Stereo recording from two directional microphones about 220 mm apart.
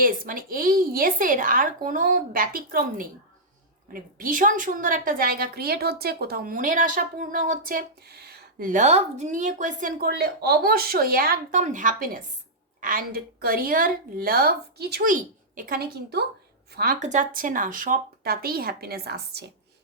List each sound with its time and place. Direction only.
0.0 s a woman's voice: 40° right (ahead or behind)